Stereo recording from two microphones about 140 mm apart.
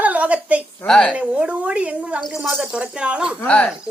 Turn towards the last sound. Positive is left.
turn(degrees=10)  # may be behind; listen again after turning